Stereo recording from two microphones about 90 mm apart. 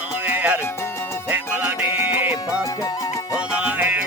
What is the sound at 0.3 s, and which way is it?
Music, 15° right (ahead or behind).